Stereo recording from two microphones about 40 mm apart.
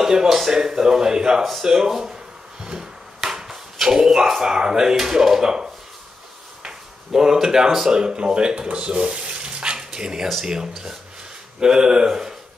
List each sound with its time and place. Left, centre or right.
0.0 s speech: centre
3.2 s chop: centre
3.8 s speech: centre